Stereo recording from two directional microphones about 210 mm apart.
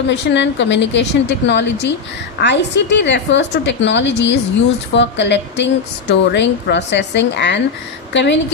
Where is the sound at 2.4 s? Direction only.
55° left (ahead or behind).